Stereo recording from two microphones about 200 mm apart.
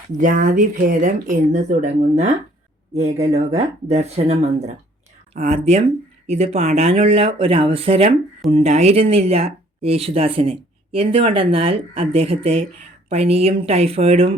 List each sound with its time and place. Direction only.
0.2 s speech: 40° right (ahead or behind)